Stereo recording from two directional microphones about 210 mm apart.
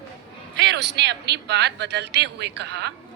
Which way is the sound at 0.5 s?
55° right (ahead or behind).